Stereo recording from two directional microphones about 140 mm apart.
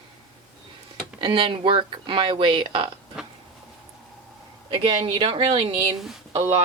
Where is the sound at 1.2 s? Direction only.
40° right (ahead or behind).